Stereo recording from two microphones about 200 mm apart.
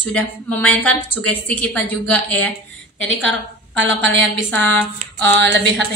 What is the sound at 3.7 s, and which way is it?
Speech, 65° right (ahead or behind).